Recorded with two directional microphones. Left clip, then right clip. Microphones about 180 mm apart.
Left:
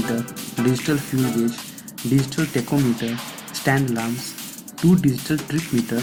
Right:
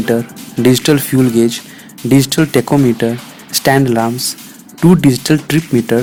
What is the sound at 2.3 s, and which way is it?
Speech, 50° right (ahead or behind).